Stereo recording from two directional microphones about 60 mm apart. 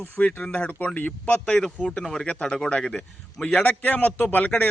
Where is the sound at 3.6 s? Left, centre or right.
Left.